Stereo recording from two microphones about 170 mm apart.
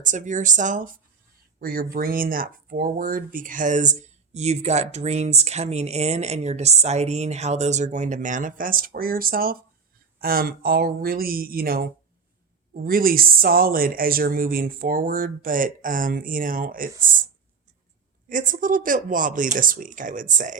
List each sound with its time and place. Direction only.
0.0 s speech: 50° right (ahead or behind)
1.5 s speech: 60° right (ahead or behind)
18.3 s speech: 50° right (ahead or behind)